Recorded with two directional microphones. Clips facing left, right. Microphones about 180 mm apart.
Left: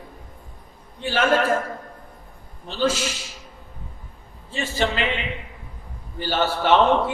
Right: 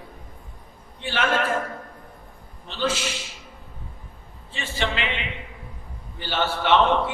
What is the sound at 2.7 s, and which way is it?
Speech, 40° left (ahead or behind).